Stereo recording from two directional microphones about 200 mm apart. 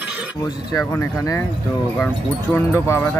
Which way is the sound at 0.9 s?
15° left (ahead or behind).